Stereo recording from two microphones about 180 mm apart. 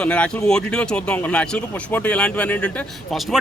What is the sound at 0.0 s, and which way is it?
Speech, 5° left (ahead or behind).